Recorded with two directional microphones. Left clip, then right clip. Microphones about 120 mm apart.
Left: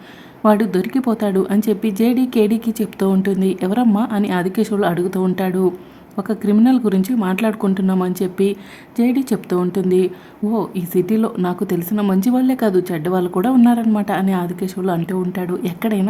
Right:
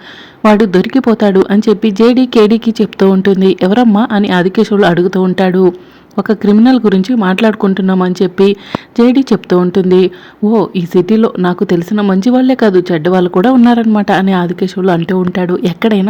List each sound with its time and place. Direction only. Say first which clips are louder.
0.4 s speech: right 7 dB; 30° right (ahead or behind)